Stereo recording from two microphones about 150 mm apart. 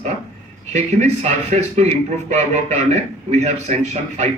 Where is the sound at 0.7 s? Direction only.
50° right (ahead or behind).